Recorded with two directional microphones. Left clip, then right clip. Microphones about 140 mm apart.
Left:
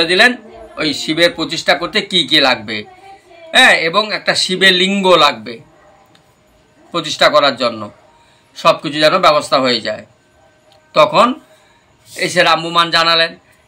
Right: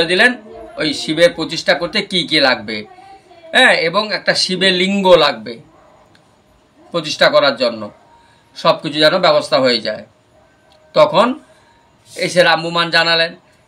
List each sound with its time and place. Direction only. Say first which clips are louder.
0.0 s speech: left 2 dB; 30° right (ahead or behind)
6.9 s speech: left 1 dB; 30° right (ahead or behind)
12.2 s speech: even; 35° right (ahead or behind)